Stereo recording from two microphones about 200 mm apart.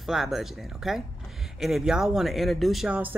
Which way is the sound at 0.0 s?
Centre (ahead or behind).